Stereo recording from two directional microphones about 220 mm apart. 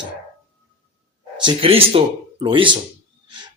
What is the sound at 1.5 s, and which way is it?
Speech, 25° right (ahead or behind).